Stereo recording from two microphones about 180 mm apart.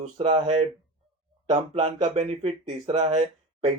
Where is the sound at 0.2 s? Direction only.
30° right (ahead or behind).